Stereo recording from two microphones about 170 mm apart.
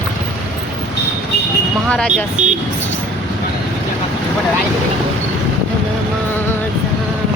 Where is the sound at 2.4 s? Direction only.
45° right (ahead or behind).